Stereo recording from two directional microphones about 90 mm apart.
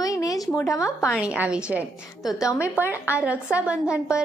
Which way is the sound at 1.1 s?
10° right (ahead or behind).